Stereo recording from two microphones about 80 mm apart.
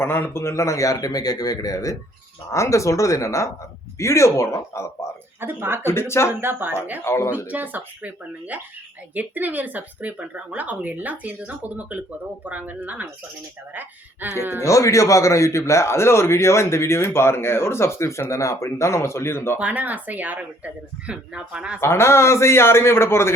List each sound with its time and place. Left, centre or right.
0.0 s a man's voice: left
5.4 s speech: right
5.8 s a man's voice: left
6.4 s speech: right
7.0 s a man's voice: left
7.4 s speech: right
14.2 s speech: right
14.6 s a man's voice: left
19.5 s speech: centre
21.8 s a man's voice: left